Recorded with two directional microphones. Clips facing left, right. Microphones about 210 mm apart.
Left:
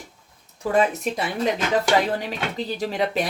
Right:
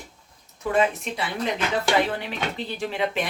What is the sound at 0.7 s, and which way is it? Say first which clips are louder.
Speech: left 2 dB; 40° left (ahead or behind).